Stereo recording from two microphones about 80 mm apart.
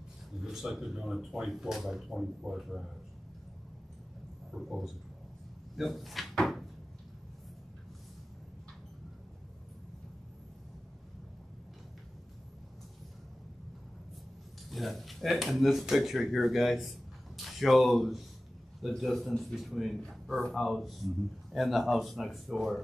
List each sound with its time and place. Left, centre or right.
0.4 s speech: centre
4.6 s speech: centre
5.8 s drawer open or close: centre
14.7 s speech: centre